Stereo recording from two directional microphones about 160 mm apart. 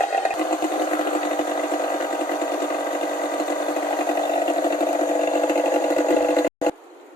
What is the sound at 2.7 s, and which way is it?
Sewing machine, 25° left (ahead or behind).